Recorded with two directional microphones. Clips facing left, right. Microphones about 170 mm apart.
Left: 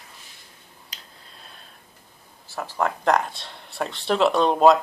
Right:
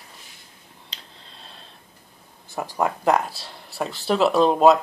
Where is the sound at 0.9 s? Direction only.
25° right (ahead or behind).